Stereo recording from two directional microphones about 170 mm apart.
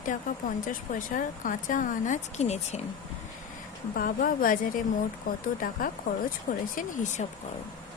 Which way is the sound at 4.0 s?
55° left (ahead or behind).